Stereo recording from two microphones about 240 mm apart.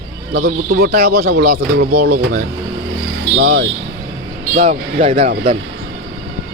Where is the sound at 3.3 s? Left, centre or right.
Right.